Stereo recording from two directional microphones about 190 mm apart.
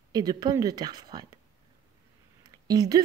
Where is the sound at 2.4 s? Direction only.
20° right (ahead or behind).